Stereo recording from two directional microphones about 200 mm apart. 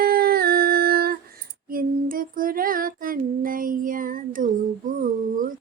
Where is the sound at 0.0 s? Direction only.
50° right (ahead or behind).